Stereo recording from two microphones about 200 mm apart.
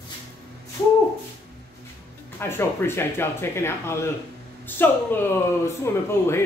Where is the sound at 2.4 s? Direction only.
10° left (ahead or behind).